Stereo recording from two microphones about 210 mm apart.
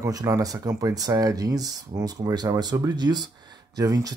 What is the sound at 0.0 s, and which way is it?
Speech, 15° right (ahead or behind).